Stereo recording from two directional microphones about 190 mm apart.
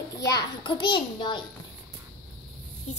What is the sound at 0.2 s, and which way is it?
A child's voice, 20° left (ahead or behind).